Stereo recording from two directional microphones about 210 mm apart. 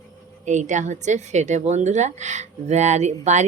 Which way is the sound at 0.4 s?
35° right (ahead or behind).